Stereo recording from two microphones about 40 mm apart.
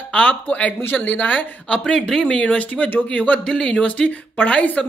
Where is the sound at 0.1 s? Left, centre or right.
Left.